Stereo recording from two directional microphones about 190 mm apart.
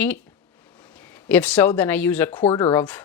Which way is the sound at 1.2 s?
5° left (ahead or behind).